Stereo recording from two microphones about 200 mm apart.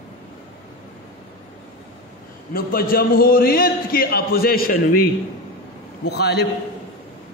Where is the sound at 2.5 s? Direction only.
45° left (ahead or behind).